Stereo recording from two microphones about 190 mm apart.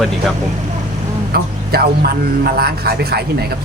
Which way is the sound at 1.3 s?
55° right (ahead or behind).